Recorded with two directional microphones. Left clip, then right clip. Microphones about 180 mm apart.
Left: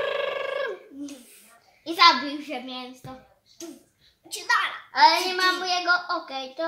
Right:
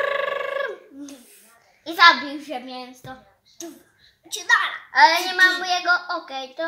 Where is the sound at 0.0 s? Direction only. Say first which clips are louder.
Right 3 dB; 5° right (ahead or behind).